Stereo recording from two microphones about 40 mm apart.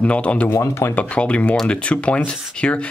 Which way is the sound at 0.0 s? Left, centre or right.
Left.